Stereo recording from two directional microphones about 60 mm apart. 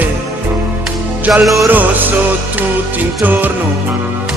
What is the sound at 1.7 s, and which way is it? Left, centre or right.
Music, right.